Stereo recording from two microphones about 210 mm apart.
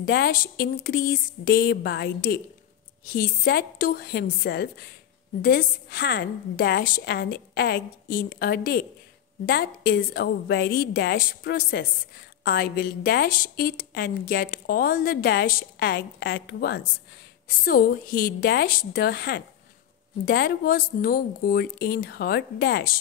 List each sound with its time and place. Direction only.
0.0 s a woman's voice: 45° left (ahead or behind)